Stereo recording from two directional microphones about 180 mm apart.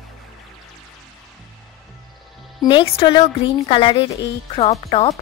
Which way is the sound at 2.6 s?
30° left (ahead or behind).